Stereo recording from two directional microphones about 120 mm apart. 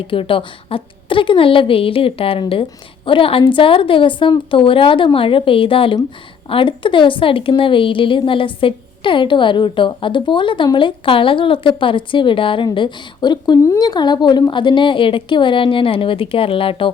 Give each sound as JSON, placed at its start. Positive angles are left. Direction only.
{"t": 0.1, "sound": "a woman's voice", "side_deg": 45}